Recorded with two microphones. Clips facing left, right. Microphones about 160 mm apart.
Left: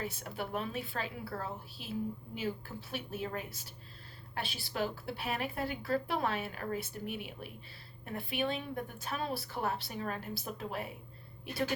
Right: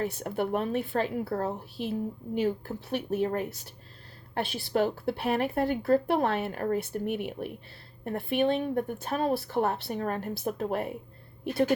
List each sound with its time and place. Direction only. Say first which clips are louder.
0.0 s a woman's voice: right 9 dB; 60° right (ahead or behind)